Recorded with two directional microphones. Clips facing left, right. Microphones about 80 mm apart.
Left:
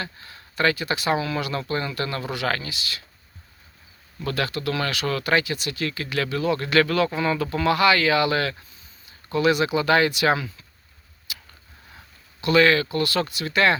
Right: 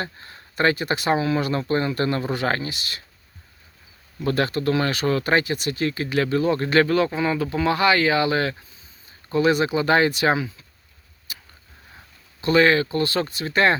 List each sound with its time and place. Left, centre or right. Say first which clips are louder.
0.0 s speech: right 3 dB; right
4.2 s speech: right 4 dB; right
5.8 s speech: right 4 dB; right
12.4 s speech: right 1 dB; right